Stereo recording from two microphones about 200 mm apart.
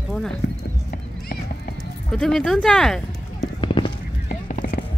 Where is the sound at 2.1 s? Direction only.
5° left (ahead or behind).